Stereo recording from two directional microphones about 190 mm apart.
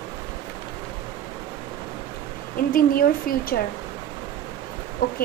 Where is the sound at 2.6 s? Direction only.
50° left (ahead or behind).